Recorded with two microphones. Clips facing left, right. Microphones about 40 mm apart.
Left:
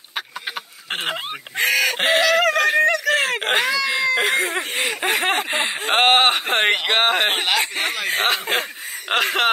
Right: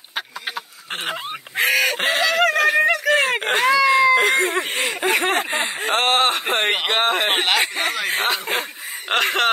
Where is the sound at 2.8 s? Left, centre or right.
Centre.